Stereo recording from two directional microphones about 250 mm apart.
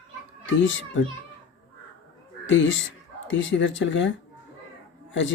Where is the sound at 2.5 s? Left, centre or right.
Left.